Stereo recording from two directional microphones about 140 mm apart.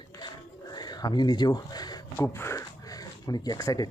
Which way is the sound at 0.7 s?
30° left (ahead or behind).